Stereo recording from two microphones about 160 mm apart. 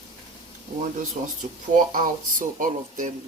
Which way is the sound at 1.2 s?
50° right (ahead or behind).